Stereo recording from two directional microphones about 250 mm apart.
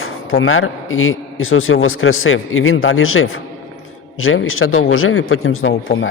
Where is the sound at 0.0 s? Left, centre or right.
Left.